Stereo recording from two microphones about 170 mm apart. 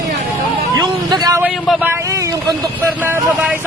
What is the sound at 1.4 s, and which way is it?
Speech, 5° right (ahead or behind).